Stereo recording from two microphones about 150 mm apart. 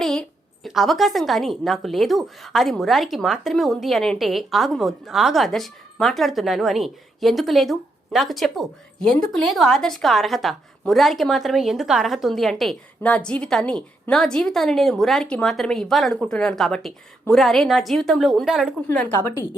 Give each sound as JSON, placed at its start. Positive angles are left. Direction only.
{"t": 0.0, "sound": "a woman's voice", "side_deg": 5}
{"t": 18.9, "sound": "a woman's voice", "side_deg": 15}